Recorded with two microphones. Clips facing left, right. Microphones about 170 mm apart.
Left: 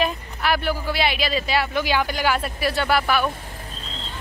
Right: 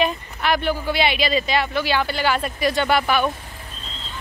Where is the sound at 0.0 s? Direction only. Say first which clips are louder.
Right 2 dB; 5° left (ahead or behind).